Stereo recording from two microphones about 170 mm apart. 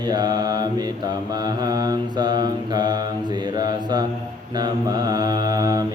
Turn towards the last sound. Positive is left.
turn(degrees=-20)  # may be behind; listen again after turning